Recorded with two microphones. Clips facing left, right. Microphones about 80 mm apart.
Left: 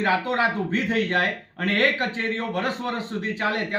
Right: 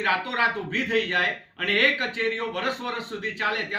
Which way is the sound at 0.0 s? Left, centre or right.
Left.